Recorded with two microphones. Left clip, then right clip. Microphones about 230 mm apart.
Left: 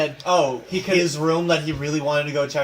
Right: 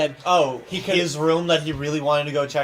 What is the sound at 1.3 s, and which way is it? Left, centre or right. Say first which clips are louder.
A man's voice: right 1 dB; right.